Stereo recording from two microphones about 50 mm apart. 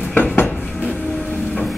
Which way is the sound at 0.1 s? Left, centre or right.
Left.